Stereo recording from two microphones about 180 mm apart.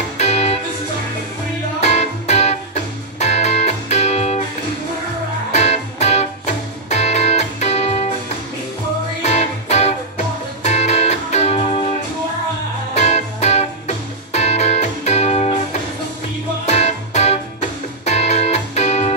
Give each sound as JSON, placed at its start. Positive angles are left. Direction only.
{"t": 0.2, "sound": "music", "side_deg": 35}
{"t": 1.8, "sound": "music", "side_deg": 40}
{"t": 5.5, "sound": "music", "side_deg": 40}
{"t": 9.2, "sound": "music", "side_deg": 40}
{"t": 12.9, "sound": "music", "side_deg": 40}
{"t": 16.6, "sound": "music", "side_deg": 40}